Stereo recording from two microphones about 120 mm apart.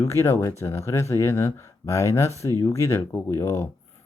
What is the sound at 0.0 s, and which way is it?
Speech, 25° left (ahead or behind).